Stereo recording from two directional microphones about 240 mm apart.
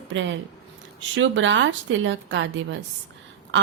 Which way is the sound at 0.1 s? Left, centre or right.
Right.